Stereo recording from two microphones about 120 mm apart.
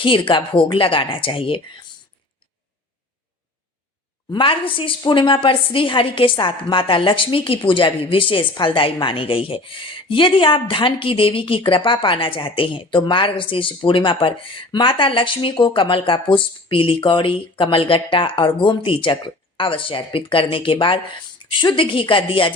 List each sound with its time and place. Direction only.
0.0 s a woman's voice: 45° left (ahead or behind)
4.3 s a woman's voice: 45° left (ahead or behind)